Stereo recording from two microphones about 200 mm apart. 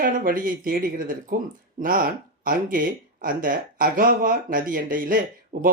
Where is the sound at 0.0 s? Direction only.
45° right (ahead or behind).